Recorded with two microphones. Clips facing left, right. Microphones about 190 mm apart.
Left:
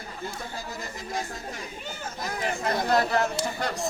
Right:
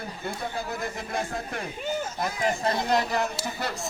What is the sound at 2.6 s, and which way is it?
Speech, 25° right (ahead or behind).